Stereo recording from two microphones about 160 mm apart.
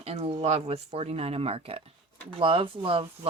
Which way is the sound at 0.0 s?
40° right (ahead or behind).